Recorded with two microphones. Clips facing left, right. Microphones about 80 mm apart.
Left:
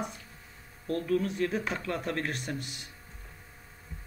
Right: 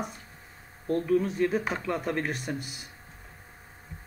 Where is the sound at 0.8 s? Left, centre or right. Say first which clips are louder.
Right 4 dB; centre.